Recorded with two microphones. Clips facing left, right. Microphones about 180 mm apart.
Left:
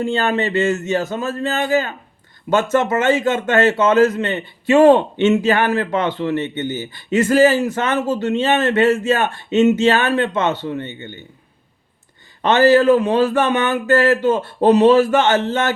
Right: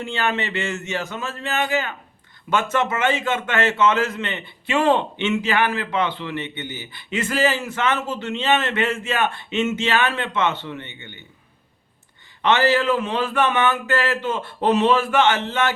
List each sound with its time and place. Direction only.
0.0 s a man's voice: 40° left (ahead or behind)
12.4 s a man's voice: 45° left (ahead or behind)